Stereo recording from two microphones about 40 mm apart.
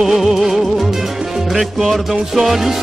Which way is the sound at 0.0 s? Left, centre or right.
Centre.